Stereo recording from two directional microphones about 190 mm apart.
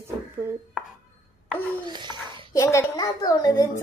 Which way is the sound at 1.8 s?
25° right (ahead or behind).